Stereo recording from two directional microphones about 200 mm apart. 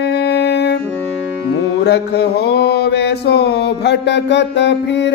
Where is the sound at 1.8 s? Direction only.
55° left (ahead or behind).